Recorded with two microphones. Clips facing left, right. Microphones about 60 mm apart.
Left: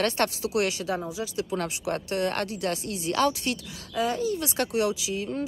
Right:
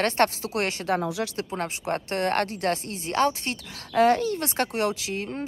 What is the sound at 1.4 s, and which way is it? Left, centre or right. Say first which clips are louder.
Speech: left 1 dB; right.